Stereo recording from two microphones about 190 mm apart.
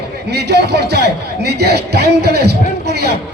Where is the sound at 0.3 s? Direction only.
60° right (ahead or behind).